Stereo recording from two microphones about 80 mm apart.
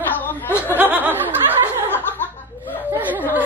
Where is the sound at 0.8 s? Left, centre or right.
Right.